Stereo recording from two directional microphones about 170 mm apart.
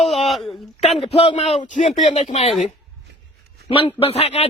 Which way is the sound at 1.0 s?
35° left (ahead or behind).